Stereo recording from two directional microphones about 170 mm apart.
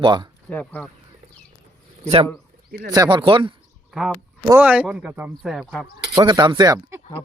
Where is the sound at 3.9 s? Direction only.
5° right (ahead or behind).